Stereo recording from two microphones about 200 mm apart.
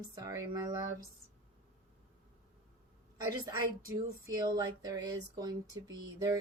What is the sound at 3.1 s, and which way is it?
A woman's voice, 20° right (ahead or behind).